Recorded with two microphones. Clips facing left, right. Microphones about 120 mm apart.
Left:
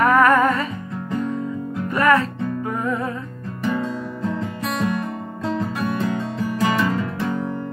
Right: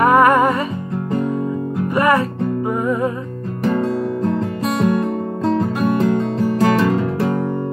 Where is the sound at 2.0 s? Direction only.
15° right (ahead or behind).